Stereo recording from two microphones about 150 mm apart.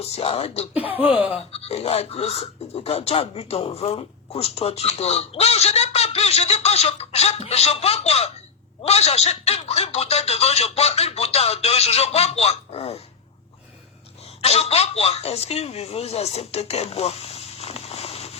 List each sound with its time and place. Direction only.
0.0 s speech: 40° left (ahead or behind)
1.0 s a sound: 10° right (ahead or behind)
1.5 s speech: 40° left (ahead or behind)
14.4 s speech: 45° left (ahead or behind)